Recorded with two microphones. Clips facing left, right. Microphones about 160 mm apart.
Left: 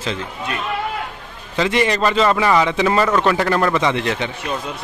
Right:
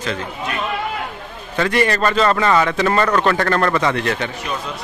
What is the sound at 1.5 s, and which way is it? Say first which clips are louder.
A man's voice: even; 20° left (ahead or behind).